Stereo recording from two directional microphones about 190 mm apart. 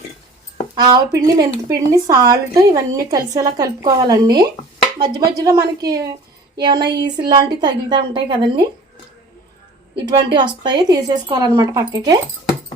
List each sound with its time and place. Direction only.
0.8 s speech: 20° right (ahead or behind)
6.8 s speech: 60° right (ahead or behind)
7.2 s speech: 20° right (ahead or behind)
10.3 s speech: 25° right (ahead or behind)